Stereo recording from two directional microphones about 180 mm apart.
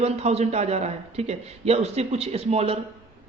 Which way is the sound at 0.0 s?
35° right (ahead or behind).